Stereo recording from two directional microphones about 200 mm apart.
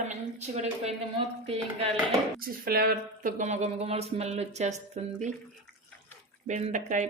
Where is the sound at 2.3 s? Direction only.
45° right (ahead or behind).